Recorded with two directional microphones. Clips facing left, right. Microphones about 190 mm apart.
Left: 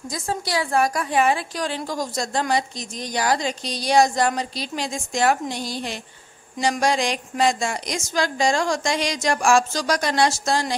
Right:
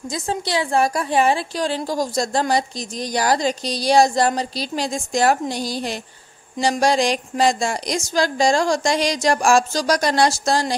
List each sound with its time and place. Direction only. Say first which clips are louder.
0.1 s a woman's voice: right 2 dB; 25° right (ahead or behind)